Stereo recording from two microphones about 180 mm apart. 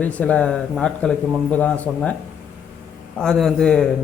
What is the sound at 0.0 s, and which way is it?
A man's voice, 5° left (ahead or behind).